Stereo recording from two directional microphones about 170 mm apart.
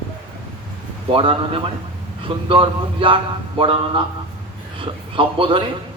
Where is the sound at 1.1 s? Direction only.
30° right (ahead or behind).